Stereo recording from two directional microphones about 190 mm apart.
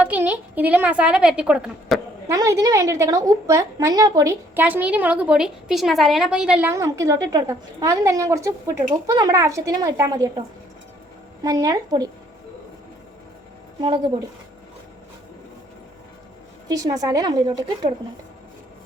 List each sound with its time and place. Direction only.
0.0 s a woman's voice: 10° right (ahead or behind)
2.2 s a woman's voice: 15° right (ahead or behind)
11.4 s a woman's voice: 20° right (ahead or behind)
13.8 s a woman's voice: 25° right (ahead or behind)
16.6 s a woman's voice: 20° right (ahead or behind)